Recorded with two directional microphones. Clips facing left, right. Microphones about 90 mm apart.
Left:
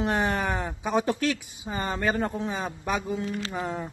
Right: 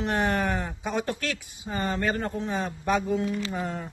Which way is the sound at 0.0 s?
15° left (ahead or behind).